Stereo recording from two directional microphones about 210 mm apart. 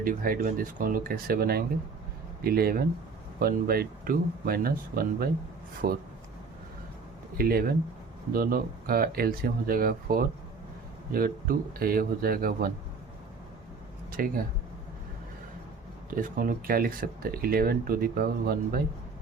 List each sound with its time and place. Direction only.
0.0 s speech: 40° right (ahead or behind)
7.3 s speech: 45° right (ahead or behind)
14.1 s speech: 40° right (ahead or behind)
16.0 s speech: 40° right (ahead or behind)